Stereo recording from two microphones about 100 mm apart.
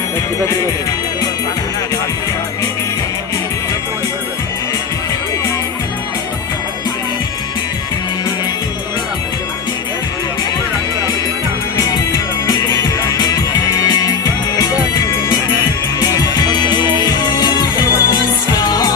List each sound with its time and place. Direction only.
11.8 s music: 40° left (ahead or behind)
16.0 s music: 40° left (ahead or behind)